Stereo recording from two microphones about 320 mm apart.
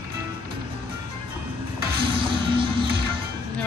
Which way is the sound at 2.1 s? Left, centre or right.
Centre.